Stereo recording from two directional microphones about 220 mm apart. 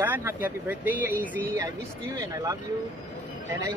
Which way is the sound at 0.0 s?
10° right (ahead or behind).